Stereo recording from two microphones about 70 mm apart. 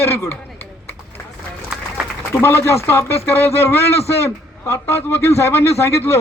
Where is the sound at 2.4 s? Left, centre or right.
Left.